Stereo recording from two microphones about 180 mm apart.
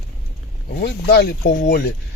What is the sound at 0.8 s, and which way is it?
Speech, 65° left (ahead or behind).